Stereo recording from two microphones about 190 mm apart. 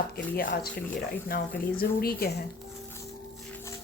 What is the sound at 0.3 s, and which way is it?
Speech, 55° left (ahead or behind).